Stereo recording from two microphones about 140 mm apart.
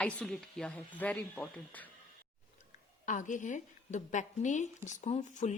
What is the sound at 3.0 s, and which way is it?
A woman's voice, 65° left (ahead or behind).